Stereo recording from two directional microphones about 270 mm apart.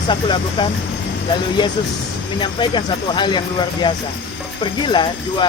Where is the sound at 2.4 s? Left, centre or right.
Centre.